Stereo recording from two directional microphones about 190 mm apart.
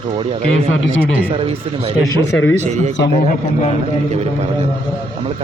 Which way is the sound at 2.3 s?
85° left.